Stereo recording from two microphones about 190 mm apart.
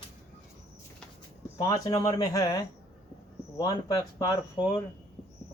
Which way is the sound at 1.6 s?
20° left (ahead or behind).